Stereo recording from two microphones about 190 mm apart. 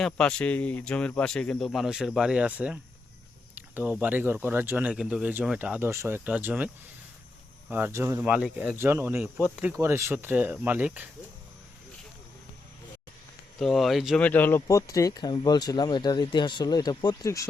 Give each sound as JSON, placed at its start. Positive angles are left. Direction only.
{"t": 0.0, "sound": "speech", "side_deg": 5}
{"t": 3.5, "sound": "a sound", "side_deg": -10}
{"t": 4.0, "sound": "speech", "side_deg": -10}
{"t": 7.7, "sound": "speech", "side_deg": -10}
{"t": 13.6, "sound": "speech", "side_deg": 0}